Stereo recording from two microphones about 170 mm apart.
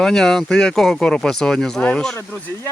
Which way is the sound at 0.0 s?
Centre (ahead or behind).